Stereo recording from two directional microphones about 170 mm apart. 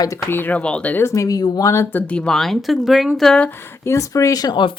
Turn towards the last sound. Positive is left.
turn(degrees=25)  # may be behind; listen again after turning